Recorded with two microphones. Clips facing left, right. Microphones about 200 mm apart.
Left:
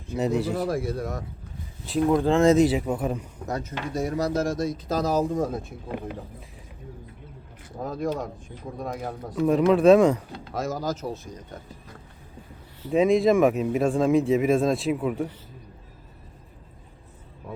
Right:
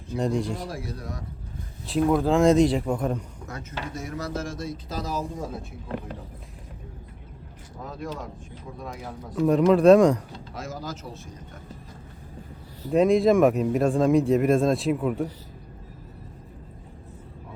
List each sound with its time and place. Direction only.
0.2 s speech: 5° left (ahead or behind)
0.7 s speech: 50° left (ahead or behind)
1.8 s speech: centre (ahead or behind)
3.4 s speech: 35° left (ahead or behind)
7.8 s speech: 40° left (ahead or behind)
8.8 s speech: 55° left (ahead or behind)
9.3 s speech: centre (ahead or behind)
10.5 s speech: 40° left (ahead or behind)
12.9 s speech: centre (ahead or behind)